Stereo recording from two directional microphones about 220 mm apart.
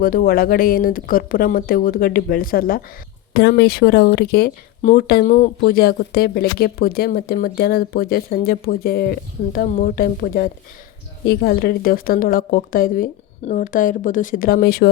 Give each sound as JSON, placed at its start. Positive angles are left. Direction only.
{"t": 0.0, "sound": "speech", "side_deg": 40}